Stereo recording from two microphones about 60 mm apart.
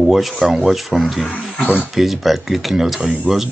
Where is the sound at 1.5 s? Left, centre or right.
Centre.